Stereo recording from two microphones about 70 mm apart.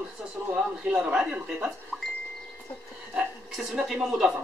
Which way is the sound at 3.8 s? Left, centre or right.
Centre.